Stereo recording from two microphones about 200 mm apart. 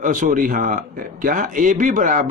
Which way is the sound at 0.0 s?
40° right (ahead or behind).